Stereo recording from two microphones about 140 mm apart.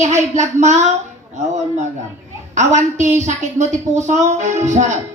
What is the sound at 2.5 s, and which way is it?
Speech, 55° right (ahead or behind).